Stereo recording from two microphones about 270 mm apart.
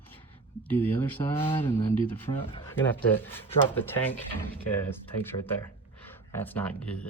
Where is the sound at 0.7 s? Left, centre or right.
Centre.